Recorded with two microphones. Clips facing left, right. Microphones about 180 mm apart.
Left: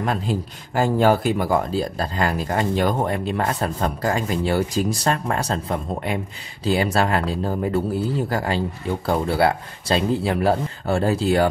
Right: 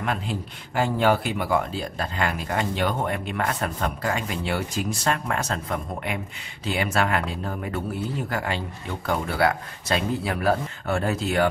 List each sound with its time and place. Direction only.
0.0 s speech: 35° left (ahead or behind)